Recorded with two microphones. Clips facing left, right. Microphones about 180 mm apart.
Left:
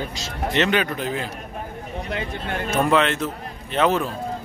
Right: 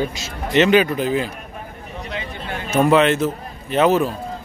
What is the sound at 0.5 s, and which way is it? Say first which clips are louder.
Speech: right 7 dB; 5° right (ahead or behind).